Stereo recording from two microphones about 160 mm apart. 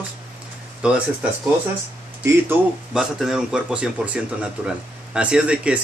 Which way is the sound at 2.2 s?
20° right (ahead or behind).